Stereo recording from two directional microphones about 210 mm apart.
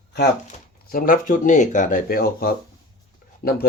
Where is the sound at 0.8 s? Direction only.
40° left (ahead or behind).